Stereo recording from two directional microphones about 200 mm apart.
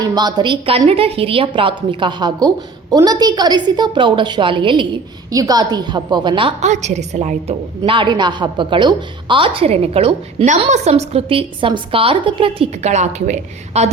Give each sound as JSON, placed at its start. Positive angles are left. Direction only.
{"t": 0.0, "sound": "a woman's voice", "side_deg": -20}